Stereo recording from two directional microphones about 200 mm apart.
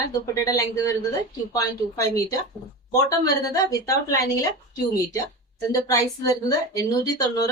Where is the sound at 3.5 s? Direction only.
15° left (ahead or behind).